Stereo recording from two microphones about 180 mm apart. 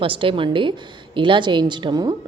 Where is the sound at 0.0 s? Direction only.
30° right (ahead or behind).